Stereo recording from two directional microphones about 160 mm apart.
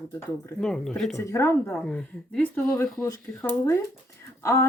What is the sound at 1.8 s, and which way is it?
A woman's voice, 5° left (ahead or behind).